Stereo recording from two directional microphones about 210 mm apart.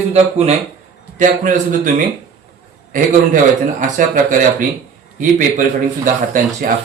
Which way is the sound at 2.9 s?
40° right (ahead or behind).